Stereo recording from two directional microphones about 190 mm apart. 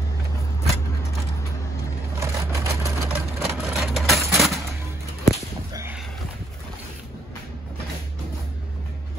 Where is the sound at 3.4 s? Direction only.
Centre (ahead or behind).